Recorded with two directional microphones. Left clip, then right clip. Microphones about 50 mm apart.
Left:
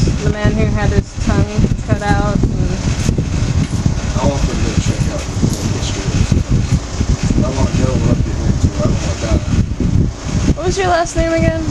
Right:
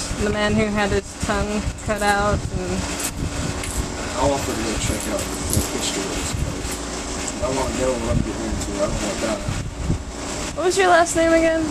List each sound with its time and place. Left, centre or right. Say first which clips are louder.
0.3 s speech: right 1 dB; centre
10.6 s speech: even; centre
11.1 s speech: left 1 dB; centre